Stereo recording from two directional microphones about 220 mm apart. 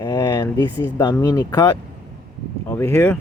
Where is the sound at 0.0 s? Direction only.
20° left (ahead or behind).